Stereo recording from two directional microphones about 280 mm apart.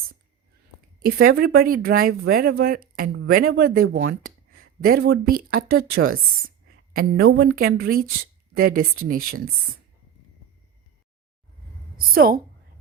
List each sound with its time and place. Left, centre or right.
1.0 s a woman's voice: right
11.9 s a woman's voice: right